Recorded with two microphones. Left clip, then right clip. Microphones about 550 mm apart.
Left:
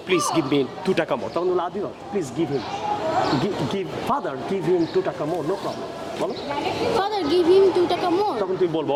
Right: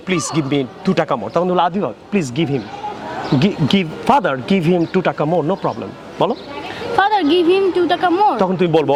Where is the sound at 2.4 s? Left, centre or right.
Right.